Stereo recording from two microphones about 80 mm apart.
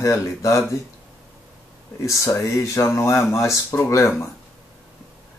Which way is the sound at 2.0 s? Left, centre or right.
Left.